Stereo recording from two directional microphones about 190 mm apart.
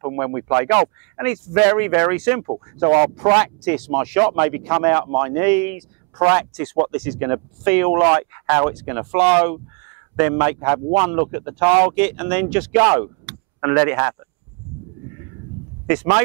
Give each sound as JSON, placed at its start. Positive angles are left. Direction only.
{"t": 0.0, "sound": "speech", "side_deg": -15}
{"t": 2.4, "sound": "speech", "side_deg": -20}
{"t": 2.9, "sound": "speech", "side_deg": -10}